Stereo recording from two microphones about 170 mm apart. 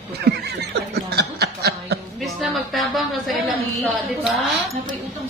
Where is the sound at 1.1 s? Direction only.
70° right (ahead or behind).